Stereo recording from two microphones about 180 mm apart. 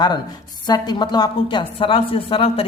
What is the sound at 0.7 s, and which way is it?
A woman's voice, 25° left (ahead or behind).